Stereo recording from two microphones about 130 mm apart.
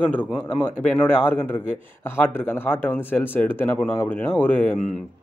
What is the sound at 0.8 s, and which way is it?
Speech, 15° left (ahead or behind).